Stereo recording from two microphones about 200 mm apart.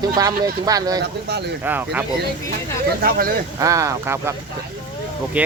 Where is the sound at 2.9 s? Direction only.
50° right (ahead or behind).